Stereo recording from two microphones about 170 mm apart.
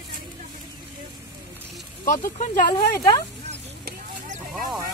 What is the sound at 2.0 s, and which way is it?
Speech, 50° left (ahead or behind).